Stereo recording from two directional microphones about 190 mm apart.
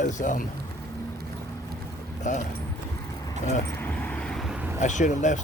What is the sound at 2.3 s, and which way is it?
Speech, 40° left (ahead or behind).